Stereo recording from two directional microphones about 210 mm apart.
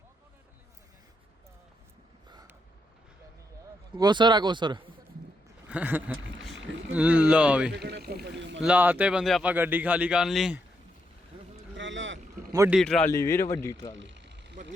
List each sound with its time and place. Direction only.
2.3 s a sound: 15° right (ahead or behind)
3.9 s speech: 20° right (ahead or behind)
5.6 s a man's voice: 5° right (ahead or behind)
7.7 s speech: 50° right (ahead or behind)
8.6 s a man's voice: 5° right (ahead or behind)
11.8 s boat: 60° right (ahead or behind)
12.5 s speech: 15° right (ahead or behind)
12.7 s speech: 5° left (ahead or behind)
14.0 s vehicle: 55° right (ahead or behind)